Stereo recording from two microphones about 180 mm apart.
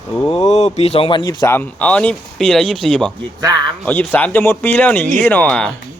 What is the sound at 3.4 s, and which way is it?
Speech, 20° right (ahead or behind).